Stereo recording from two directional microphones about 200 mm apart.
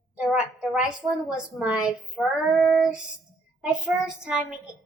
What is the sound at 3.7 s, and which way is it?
Speech, 5° right (ahead or behind).